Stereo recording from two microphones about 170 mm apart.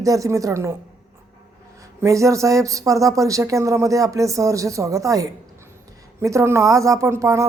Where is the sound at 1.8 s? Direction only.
20° right (ahead or behind).